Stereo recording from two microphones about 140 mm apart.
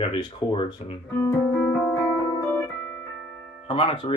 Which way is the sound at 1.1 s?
20° left (ahead or behind).